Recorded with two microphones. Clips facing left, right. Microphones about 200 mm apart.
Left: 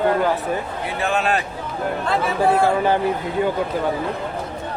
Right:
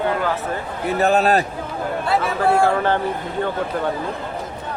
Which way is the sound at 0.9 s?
40° right (ahead or behind).